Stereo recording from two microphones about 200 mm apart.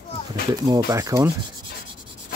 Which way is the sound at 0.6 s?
20° right (ahead or behind).